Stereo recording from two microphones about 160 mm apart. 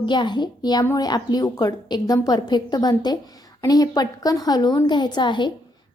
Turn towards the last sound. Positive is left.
turn(degrees=30)  # may be behind; listen again after turning